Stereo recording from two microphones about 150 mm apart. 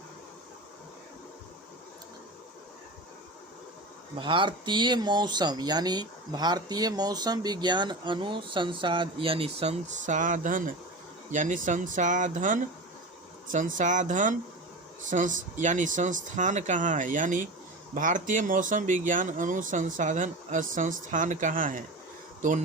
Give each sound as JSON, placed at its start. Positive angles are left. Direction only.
{"t": 4.2, "sound": "speech", "side_deg": -35}